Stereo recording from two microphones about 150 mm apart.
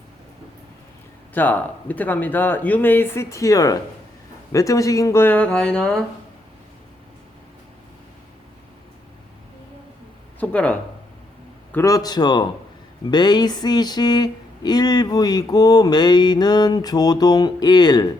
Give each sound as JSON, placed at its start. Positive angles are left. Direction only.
{"t": 1.3, "sound": "speech", "side_deg": 10}
{"t": 10.4, "sound": "speech", "side_deg": 10}
{"t": 11.7, "sound": "speech", "side_deg": 20}